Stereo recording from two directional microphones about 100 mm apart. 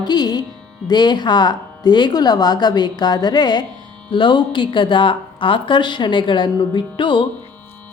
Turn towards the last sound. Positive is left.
turn(degrees=55)  # may be behind; listen again after turning